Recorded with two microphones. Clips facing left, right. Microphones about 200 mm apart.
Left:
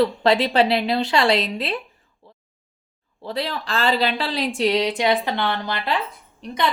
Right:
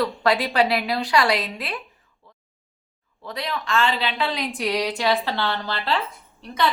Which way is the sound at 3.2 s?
30° left (ahead or behind).